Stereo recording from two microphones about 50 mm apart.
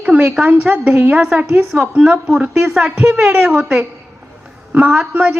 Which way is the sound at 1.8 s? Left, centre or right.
Right.